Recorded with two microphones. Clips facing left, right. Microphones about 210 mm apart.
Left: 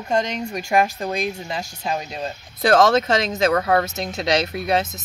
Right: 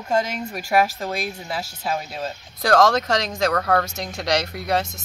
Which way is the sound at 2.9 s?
25° left (ahead or behind).